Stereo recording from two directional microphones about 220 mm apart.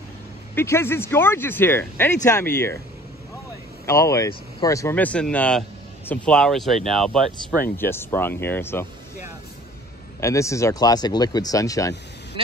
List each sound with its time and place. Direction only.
0.6 s speech: 10° left (ahead or behind)
3.8 s speech: 15° left (ahead or behind)
10.2 s speech: 15° left (ahead or behind)